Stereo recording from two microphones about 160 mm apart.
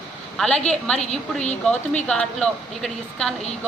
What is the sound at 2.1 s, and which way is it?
A woman's voice, 5° left (ahead or behind).